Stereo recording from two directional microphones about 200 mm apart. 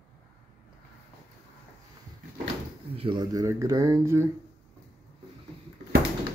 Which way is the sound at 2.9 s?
25° right (ahead or behind).